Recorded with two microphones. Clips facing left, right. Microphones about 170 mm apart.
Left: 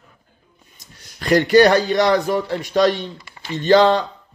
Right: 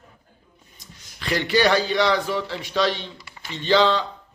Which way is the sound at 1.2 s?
45° left (ahead or behind).